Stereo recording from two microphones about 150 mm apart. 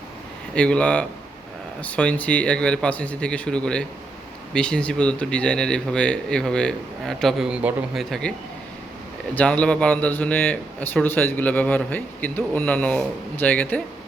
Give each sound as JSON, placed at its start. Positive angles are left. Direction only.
{"t": 0.5, "sound": "a man's voice", "side_deg": 5}
{"t": 8.2, "sound": "a man's voice", "side_deg": 5}